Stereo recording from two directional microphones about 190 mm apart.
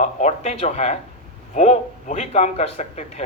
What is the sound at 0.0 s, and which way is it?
Speech, 40° left (ahead or behind).